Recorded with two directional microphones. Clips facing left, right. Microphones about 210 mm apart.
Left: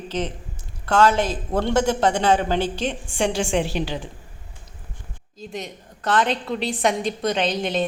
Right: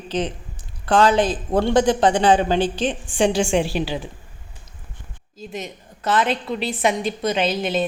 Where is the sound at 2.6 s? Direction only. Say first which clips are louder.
Right 3 dB; 10° left (ahead or behind).